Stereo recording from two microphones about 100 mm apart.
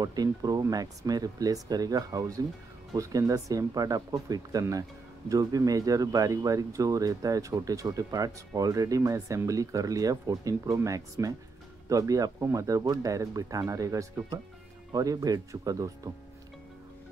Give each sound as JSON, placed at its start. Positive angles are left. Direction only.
{"t": 0.0, "sound": "speech", "side_deg": -40}